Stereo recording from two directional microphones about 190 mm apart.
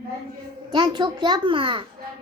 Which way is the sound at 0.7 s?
25° right (ahead or behind).